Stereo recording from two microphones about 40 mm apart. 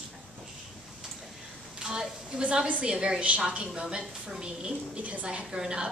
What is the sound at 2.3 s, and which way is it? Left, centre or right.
Speech, right.